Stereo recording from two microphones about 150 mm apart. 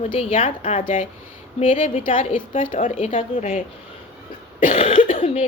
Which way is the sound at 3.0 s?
35° left (ahead or behind).